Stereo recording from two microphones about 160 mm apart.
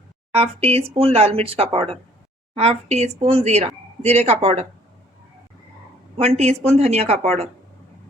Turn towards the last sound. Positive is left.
turn(degrees=-40)  # may be behind; listen again after turning